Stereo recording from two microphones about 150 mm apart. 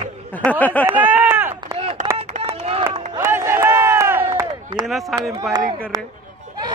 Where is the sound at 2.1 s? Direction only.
45° right (ahead or behind).